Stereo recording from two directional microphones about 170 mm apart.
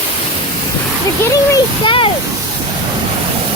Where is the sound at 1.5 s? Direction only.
30° left (ahead or behind).